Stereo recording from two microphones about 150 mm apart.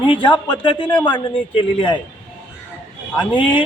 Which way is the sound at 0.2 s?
30° left (ahead or behind).